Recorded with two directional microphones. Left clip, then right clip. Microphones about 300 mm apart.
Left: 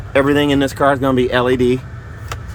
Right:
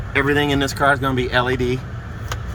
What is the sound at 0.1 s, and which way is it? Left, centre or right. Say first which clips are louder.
Speech: left 4 dB; centre.